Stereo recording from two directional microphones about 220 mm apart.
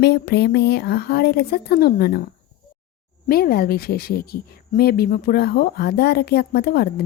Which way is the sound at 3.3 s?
45° left (ahead or behind).